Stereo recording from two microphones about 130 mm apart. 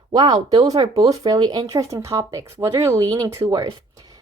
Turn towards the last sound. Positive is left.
turn(degrees=-25)  # may be behind; listen again after turning